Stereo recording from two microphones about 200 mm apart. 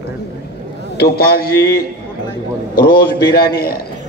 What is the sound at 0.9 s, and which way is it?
A man's voice, 50° left (ahead or behind).